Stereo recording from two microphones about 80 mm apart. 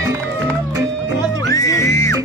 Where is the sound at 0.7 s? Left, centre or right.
Right.